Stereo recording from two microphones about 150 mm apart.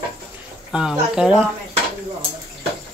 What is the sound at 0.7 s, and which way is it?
Speech, 5° right (ahead or behind).